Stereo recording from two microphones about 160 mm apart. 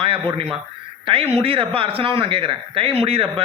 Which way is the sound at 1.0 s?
35° right (ahead or behind).